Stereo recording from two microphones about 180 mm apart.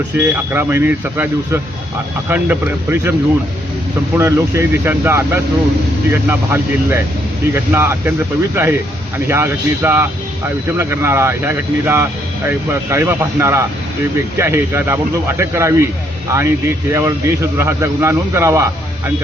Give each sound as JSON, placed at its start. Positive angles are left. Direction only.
{"t": 0.1, "sound": "a man's voice", "side_deg": -10}
{"t": 2.3, "sound": "a man's voice", "side_deg": -10}
{"t": 4.2, "sound": "a man's voice", "side_deg": -15}